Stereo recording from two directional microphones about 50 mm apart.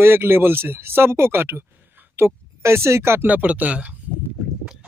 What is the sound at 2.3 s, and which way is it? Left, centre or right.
Speech, right.